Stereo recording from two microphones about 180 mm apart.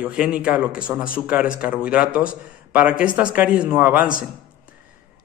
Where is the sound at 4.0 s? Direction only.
50° left (ahead or behind).